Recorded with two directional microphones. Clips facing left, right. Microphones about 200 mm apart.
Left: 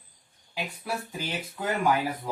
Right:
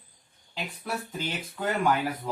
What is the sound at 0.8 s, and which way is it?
Speech, 10° left (ahead or behind).